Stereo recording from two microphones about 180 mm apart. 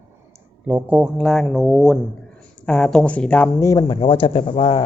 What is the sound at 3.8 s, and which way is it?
Speech, 30° left (ahead or behind).